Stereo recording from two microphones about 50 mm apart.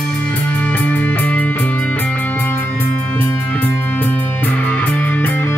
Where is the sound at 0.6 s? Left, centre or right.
Left.